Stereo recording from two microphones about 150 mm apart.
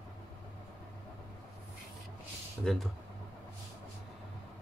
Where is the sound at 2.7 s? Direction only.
5° left (ahead or behind).